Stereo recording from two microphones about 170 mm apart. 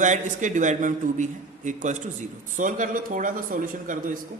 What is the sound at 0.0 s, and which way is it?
A man's voice, 45° right (ahead or behind).